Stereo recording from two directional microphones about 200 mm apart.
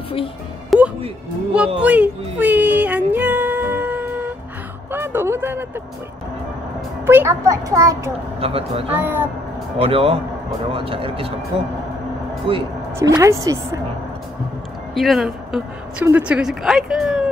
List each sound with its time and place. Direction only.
0.7 s music: 5° right (ahead or behind)
4.9 s speech: 10° right (ahead or behind)
7.1 s a woman's voice: 15° right (ahead or behind)
8.4 s speech: 30° right (ahead or behind)
8.9 s a woman's voice: 10° right (ahead or behind)
9.8 s speech: 30° right (ahead or behind)
12.4 s a woman's voice: 25° right (ahead or behind)
15.0 s speech: centre (ahead or behind)